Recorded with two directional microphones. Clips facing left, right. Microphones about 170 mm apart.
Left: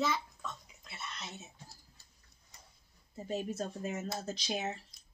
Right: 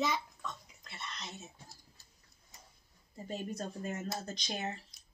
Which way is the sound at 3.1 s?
5° left (ahead or behind).